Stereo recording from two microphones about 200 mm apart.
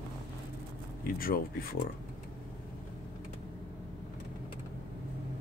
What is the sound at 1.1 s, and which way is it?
Speech, 45° left (ahead or behind).